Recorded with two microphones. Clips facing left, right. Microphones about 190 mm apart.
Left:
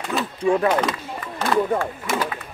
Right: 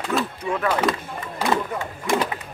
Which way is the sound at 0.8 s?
5° right (ahead or behind).